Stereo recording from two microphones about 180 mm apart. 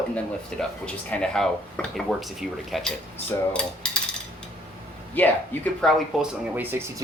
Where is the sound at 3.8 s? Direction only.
5° left (ahead or behind).